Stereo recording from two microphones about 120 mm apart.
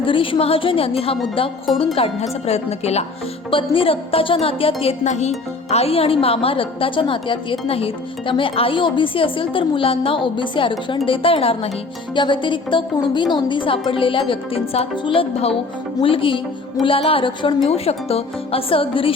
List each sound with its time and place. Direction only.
0.0 s a woman's voice: 45° left (ahead or behind)
2.0 s speech: 65° left (ahead or behind)
3.5 s a woman's voice: 50° left (ahead or behind)
5.0 s speech: 75° left (ahead or behind)
5.7 s a woman's voice: 55° left (ahead or behind)
12.1 s a woman's voice: 40° left (ahead or behind)